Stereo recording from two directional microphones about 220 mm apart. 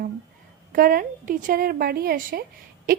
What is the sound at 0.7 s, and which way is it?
A woman's voice, 40° right (ahead or behind).